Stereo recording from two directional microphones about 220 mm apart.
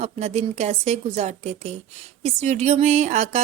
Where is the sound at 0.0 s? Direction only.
30° right (ahead or behind).